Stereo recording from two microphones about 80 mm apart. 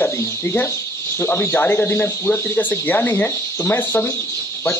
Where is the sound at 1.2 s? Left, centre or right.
Left.